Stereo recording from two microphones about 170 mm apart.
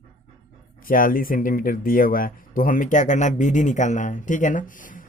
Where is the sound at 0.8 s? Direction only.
55° left (ahead or behind).